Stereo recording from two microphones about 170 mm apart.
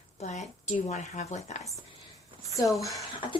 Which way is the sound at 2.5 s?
20° left (ahead or behind).